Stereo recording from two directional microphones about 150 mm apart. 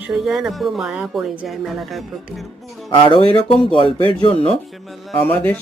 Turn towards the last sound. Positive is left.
turn(degrees=10)  # may be behind; listen again after turning